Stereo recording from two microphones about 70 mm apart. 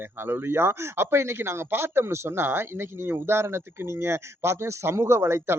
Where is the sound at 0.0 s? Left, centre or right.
Right.